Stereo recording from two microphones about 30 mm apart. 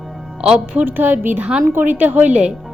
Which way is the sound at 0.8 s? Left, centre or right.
Right.